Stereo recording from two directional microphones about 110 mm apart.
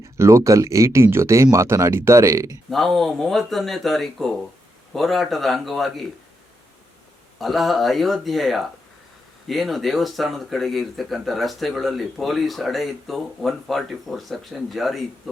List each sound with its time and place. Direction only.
0.2 s speech: 25° right (ahead or behind)
2.6 s speech: centre (ahead or behind)
7.3 s speech: centre (ahead or behind)